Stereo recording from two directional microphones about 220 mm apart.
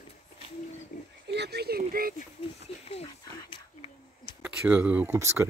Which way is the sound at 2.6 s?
25° left (ahead or behind).